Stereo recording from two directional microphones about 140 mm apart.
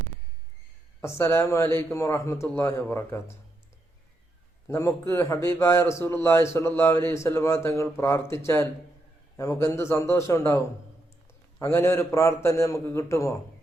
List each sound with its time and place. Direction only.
1.0 s a man's voice: 20° left (ahead or behind)
4.7 s a man's voice: 20° left (ahead or behind)
11.6 s a man's voice: 20° left (ahead or behind)